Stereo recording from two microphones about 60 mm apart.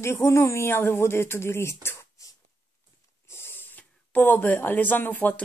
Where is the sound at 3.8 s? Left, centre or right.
Left.